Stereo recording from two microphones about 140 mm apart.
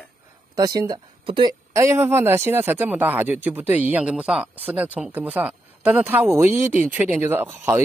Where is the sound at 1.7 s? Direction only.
20° right (ahead or behind).